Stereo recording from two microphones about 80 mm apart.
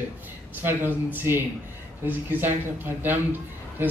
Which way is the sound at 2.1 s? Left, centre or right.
Right.